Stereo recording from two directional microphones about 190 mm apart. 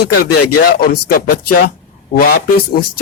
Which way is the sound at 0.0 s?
55° left (ahead or behind).